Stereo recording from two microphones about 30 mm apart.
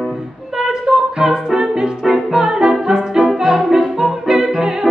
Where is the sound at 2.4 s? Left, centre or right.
Right.